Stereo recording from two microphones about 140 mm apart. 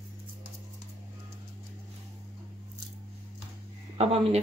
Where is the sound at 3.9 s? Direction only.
50° right (ahead or behind).